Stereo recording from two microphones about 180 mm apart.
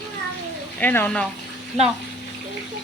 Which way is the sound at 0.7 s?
10° left (ahead or behind).